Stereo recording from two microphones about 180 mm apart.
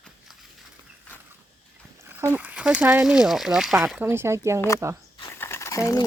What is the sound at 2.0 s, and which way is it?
Speech, 10° right (ahead or behind).